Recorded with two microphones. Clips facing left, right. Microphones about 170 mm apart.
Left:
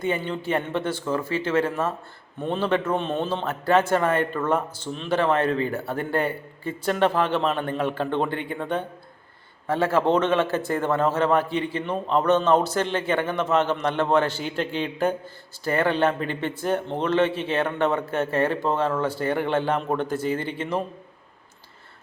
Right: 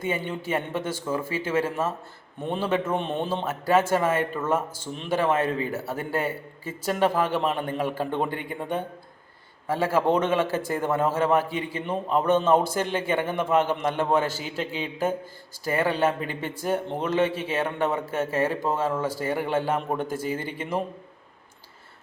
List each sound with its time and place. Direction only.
0.0 s a man's voice: 5° right (ahead or behind)